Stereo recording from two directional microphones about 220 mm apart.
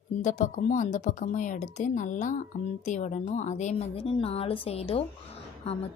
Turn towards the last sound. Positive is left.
turn(degrees=25)  # may be behind; listen again after turning